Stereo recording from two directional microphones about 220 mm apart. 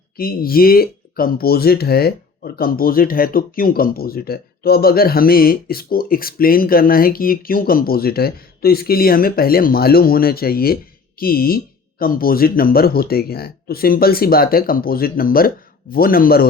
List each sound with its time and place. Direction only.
0.2 s speech: 40° left (ahead or behind)